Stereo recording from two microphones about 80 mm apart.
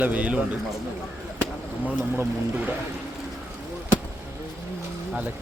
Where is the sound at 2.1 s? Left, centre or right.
Right.